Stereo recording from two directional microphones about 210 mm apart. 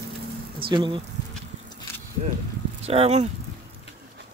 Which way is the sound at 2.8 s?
30° right (ahead or behind).